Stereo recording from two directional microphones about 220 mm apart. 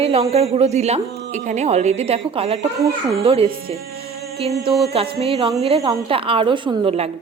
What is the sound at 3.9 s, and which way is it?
Music, 25° right (ahead or behind).